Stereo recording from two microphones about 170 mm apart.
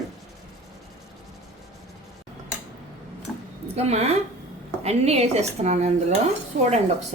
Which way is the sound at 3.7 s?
40° right (ahead or behind).